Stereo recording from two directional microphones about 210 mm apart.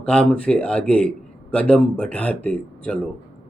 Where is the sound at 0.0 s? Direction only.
5° left (ahead or behind).